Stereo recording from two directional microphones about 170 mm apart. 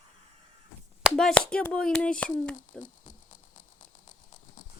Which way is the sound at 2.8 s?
50° left (ahead or behind).